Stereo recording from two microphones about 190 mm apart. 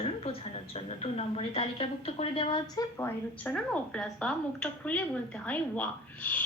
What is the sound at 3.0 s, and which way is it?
A woman's voice, 5° left (ahead or behind).